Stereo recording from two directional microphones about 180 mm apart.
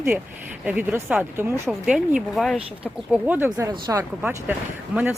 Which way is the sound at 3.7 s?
20° right (ahead or behind).